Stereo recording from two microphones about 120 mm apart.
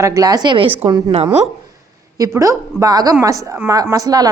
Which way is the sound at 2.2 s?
25° right (ahead or behind).